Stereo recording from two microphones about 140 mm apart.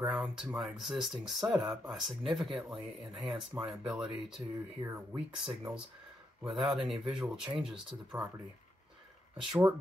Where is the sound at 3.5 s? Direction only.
20° right (ahead or behind).